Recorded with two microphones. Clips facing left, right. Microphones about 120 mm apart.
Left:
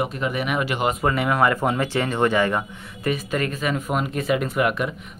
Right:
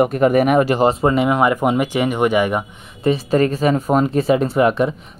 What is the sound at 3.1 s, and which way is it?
Speech, 35° right (ahead or behind).